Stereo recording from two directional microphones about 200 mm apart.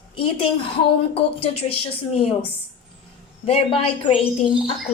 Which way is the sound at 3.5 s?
30° left (ahead or behind).